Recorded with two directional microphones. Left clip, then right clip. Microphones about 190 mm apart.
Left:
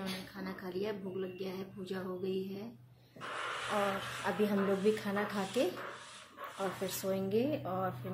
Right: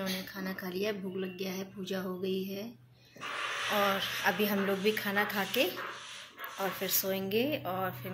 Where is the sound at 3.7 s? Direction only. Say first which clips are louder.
Right 5 dB; centre (ahead or behind).